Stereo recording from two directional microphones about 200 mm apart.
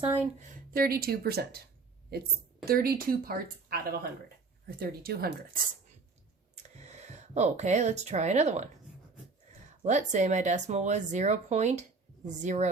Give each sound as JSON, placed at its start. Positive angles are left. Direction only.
{"t": 0.0, "sound": "speech", "side_deg": -25}
{"t": 0.4, "sound": "speech", "side_deg": -50}
{"t": 6.6, "sound": "speech", "side_deg": -35}
{"t": 9.8, "sound": "speech", "side_deg": -35}